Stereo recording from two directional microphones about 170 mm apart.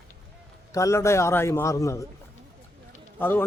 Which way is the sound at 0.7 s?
20° left (ahead or behind).